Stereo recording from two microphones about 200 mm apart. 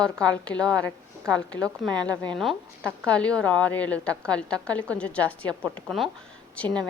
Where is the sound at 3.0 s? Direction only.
5° left (ahead or behind).